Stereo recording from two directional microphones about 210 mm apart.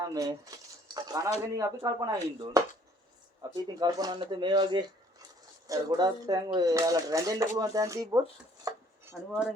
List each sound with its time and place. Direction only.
0.0 s speech: 15° right (ahead or behind)
8.7 s dishes: 15° right (ahead or behind)
9.3 s speech: centre (ahead or behind)